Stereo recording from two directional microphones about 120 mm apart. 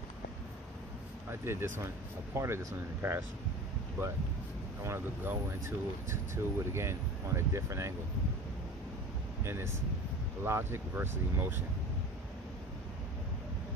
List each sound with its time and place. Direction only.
1.3 s speech: 20° right (ahead or behind)
4.8 s speech: 20° right (ahead or behind)
9.4 s speech: 20° right (ahead or behind)